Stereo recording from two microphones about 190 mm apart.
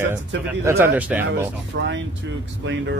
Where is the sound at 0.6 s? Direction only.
10° right (ahead or behind).